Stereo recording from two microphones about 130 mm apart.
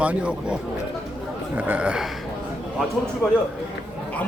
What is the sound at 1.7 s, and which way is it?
Speech, 10° right (ahead or behind).